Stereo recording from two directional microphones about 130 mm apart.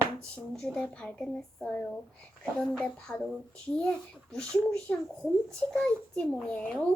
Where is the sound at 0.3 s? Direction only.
5° left (ahead or behind).